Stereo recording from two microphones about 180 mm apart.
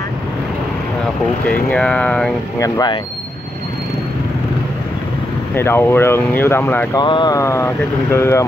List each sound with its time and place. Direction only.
1.4 s speech: 5° left (ahead or behind)
2.6 s speech: 20° left (ahead or behind)
5.6 s speech: 15° left (ahead or behind)
7.0 s speech: 25° left (ahead or behind)